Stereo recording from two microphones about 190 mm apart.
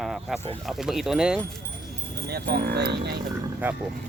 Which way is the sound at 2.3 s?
60° right (ahead or behind).